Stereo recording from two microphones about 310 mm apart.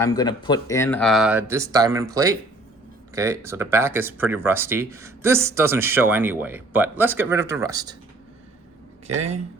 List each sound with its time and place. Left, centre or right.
0.0 s speech: centre
9.1 s speech: right